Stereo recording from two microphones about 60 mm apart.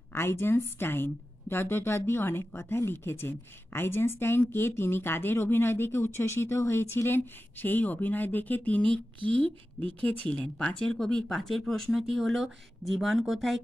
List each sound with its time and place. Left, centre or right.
0.1 s a woman's voice: left; by 13.6 s centre